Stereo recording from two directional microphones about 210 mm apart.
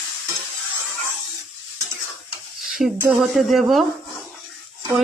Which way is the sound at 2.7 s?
Centre (ahead or behind).